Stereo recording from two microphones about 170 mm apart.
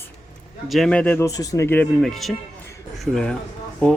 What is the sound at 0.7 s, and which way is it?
Speech, 5° left (ahead or behind).